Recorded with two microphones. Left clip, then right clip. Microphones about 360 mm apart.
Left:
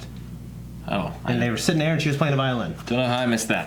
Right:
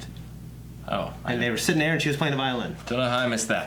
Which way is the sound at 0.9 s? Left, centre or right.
Centre.